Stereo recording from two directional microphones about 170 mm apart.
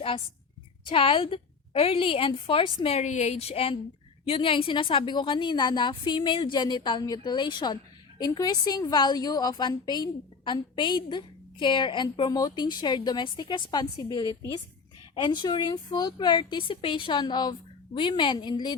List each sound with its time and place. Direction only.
0.9 s a woman's voice: 30° left (ahead or behind)